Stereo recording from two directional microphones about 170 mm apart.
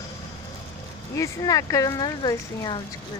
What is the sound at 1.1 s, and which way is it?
Speech, 20° left (ahead or behind).